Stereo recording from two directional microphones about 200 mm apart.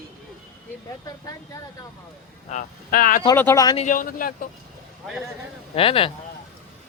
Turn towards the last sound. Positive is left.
turn(degrees=25)  # may be behind; listen again after turning